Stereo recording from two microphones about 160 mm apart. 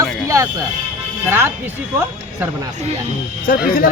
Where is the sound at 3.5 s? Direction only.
70° left (ahead or behind).